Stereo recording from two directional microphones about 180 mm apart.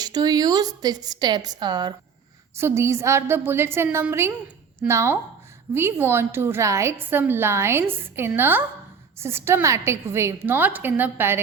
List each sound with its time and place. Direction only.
0.0 s a woman's voice: 20° right (ahead or behind)